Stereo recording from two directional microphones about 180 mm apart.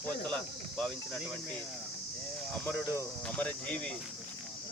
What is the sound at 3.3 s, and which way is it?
Speech, 10° left (ahead or behind).